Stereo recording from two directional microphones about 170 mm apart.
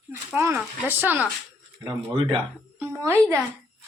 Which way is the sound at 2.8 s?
15° right (ahead or behind).